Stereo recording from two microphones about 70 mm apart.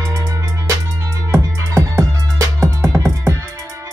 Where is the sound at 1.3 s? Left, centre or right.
Right.